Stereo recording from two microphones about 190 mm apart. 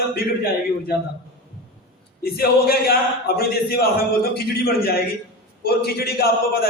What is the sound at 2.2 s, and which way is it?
Speech, 55° left (ahead or behind).